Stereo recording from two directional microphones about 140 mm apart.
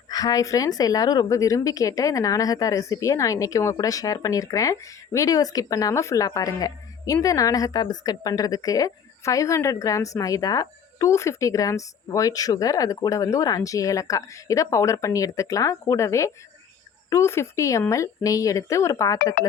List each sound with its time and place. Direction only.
0.1 s a woman's voice: 25° left (ahead or behind)